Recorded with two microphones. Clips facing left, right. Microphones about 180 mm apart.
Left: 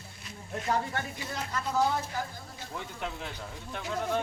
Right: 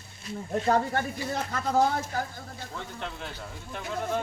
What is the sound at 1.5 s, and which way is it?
Speech, 50° right (ahead or behind).